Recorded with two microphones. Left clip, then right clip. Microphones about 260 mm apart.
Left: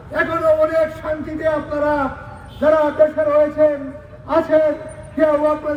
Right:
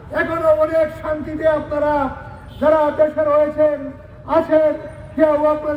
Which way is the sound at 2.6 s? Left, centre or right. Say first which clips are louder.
Even; right.